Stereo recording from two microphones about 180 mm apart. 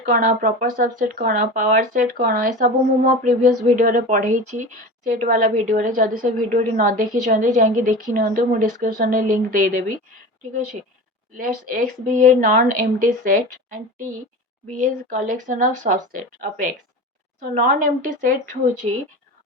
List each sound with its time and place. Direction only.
0.1 s a woman's voice: 50° right (ahead or behind)
11.3 s a woman's voice: 50° right (ahead or behind)